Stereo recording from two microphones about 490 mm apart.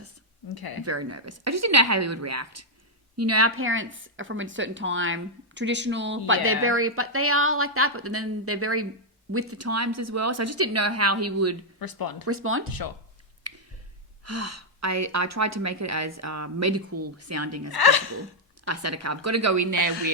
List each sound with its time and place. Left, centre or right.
0.4 s speech: left
0.9 s a woman's voice: right
11.8 s speech: left
12.2 s a woman's voice: right
13.5 s a sound: right
14.3 s speech: right
17.7 s speech: left
18.6 s speech: right